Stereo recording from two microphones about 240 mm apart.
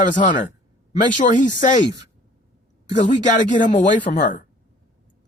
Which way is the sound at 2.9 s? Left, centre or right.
Left.